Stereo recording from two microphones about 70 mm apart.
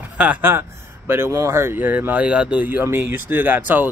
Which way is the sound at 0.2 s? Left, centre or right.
Right.